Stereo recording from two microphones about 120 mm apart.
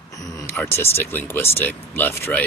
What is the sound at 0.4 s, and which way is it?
Speech, 20° left (ahead or behind).